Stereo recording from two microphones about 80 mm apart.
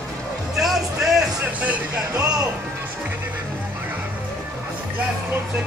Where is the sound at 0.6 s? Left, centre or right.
Centre.